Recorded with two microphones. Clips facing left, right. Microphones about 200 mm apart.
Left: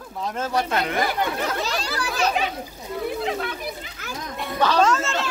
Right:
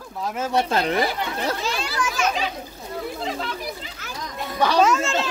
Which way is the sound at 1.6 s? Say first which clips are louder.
Right 1 dB; 40° left (ahead or behind).